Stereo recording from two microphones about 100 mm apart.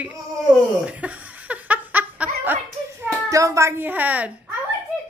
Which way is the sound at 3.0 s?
35° right (ahead or behind).